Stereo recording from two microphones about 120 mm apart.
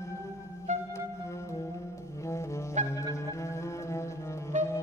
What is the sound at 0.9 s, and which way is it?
Music, 25° left (ahead or behind).